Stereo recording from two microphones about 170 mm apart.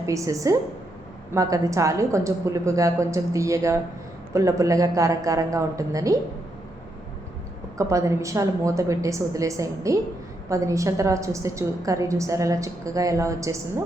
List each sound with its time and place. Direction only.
0.0 s a woman's voice: 20° right (ahead or behind)
7.8 s a woman's voice: 20° right (ahead or behind)